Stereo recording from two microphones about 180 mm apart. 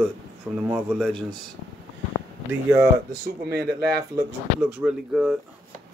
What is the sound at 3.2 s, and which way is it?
Speech, 60° right (ahead or behind).